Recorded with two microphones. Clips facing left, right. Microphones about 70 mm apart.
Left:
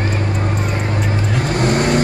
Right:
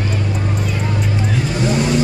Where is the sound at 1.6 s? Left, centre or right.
Left.